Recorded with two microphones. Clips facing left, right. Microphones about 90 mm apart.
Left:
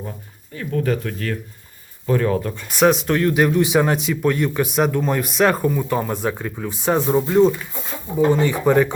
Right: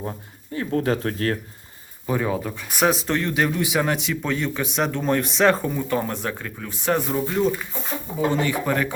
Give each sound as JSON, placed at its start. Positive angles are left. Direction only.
{"t": 0.5, "sound": "speech", "side_deg": -40}
{"t": 2.0, "sound": "speech", "side_deg": -10}
{"t": 3.6, "sound": "speech", "side_deg": 20}
{"t": 4.1, "sound": "speech", "side_deg": 10}
{"t": 6.2, "sound": "speech", "side_deg": 15}